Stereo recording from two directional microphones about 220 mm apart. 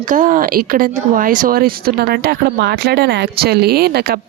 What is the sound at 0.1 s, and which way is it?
Speech, 35° right (ahead or behind).